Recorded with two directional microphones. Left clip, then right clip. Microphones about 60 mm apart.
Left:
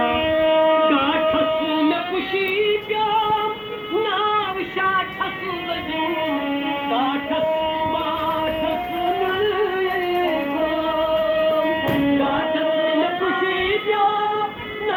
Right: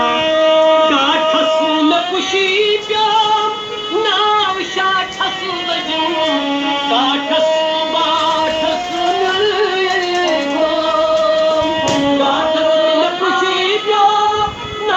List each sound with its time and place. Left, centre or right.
0.0 s music: centre
1.6 s music: right
11.9 s music: right